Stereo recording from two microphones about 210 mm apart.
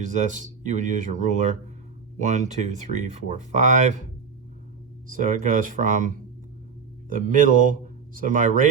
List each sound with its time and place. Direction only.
0.0 s speech: 35° right (ahead or behind)
5.0 s speech: 40° right (ahead or behind)